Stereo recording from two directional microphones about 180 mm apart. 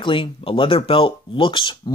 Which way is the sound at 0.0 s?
30° left (ahead or behind).